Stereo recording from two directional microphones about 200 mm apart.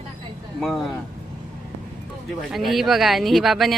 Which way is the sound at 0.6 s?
Centre (ahead or behind).